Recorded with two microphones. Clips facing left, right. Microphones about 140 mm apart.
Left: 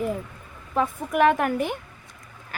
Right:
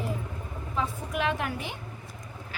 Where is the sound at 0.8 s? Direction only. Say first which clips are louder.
Left 9 dB; 50° left (ahead or behind).